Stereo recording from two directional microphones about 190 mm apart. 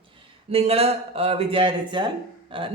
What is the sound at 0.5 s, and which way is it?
Speech, 30° right (ahead or behind).